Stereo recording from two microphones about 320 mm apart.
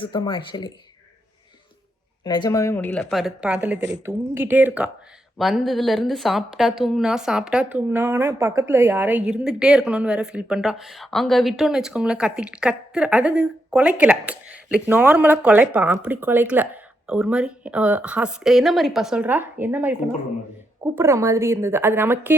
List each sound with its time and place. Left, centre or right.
0.0 s speech: centre
2.2 s a woman's voice: centre
3.8 s speech: right
4.0 s a woman's voice: centre